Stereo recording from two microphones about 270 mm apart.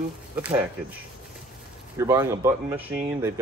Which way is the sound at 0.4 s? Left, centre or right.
Centre.